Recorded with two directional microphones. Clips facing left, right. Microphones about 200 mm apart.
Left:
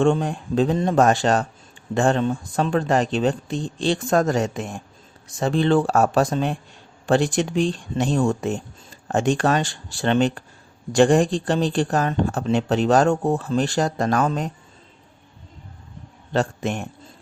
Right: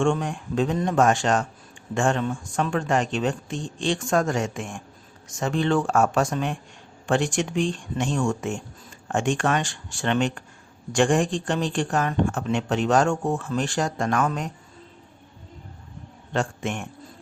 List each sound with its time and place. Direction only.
0.0 s speech: 35° left (ahead or behind)
16.3 s a man's voice: 35° left (ahead or behind)